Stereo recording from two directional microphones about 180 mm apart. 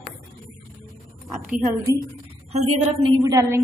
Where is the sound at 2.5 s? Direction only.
35° right (ahead or behind).